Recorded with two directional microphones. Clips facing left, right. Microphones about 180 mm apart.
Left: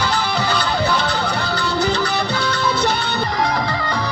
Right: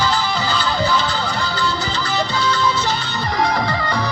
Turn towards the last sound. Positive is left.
turn(degrees=60)  # may be behind; listen again after turning